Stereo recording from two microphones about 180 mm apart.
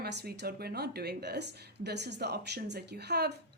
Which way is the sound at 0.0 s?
65° right (ahead or behind).